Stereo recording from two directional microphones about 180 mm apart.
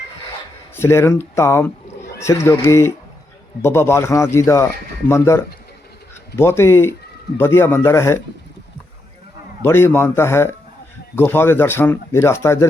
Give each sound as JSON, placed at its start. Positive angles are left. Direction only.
{"t": 0.8, "sound": "a man's voice", "side_deg": 15}
{"t": 9.6, "sound": "a man's voice", "side_deg": 15}